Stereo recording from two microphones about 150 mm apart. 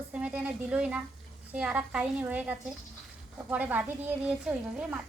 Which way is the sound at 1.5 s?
10° right (ahead or behind).